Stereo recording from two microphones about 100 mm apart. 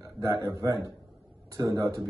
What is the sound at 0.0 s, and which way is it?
A man's voice, 35° right (ahead or behind).